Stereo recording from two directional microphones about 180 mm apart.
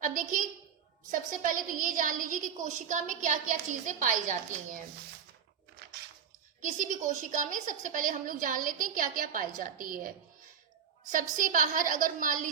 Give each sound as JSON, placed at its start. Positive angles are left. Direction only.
{"t": 0.0, "sound": "a woman's voice", "side_deg": -50}
{"t": 6.6, "sound": "a woman's voice", "side_deg": -45}
{"t": 11.1, "sound": "a woman's voice", "side_deg": -45}